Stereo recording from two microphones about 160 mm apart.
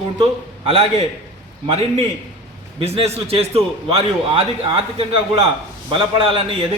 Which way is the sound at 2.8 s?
40° right (ahead or behind).